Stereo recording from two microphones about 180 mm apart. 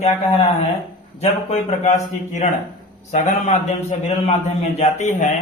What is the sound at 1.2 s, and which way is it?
A man's voice, 40° left (ahead or behind).